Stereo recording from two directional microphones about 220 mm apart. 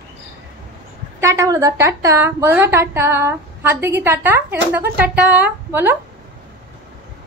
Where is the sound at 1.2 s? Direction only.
15° right (ahead or behind).